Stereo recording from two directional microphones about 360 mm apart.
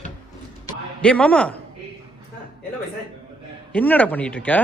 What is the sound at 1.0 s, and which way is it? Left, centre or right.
Speech, centre.